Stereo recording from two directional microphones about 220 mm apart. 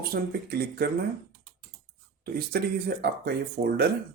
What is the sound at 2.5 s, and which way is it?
Speech, 45° right (ahead or behind).